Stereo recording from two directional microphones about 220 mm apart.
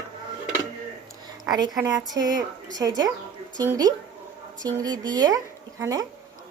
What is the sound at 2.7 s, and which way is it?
A woman's voice, 15° right (ahead or behind).